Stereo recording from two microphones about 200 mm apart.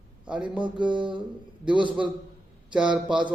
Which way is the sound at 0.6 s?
25° right (ahead or behind).